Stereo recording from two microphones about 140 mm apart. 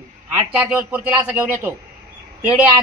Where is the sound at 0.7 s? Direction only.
15° right (ahead or behind).